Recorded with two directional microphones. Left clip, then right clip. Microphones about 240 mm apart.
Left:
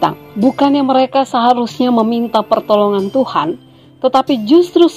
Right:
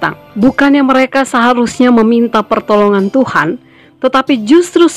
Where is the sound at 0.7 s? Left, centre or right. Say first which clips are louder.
Right 2 dB; right.